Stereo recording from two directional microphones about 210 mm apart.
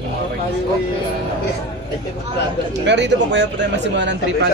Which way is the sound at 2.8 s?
55° right (ahead or behind).